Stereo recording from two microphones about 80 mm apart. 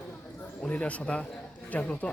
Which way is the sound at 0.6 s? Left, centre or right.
Centre.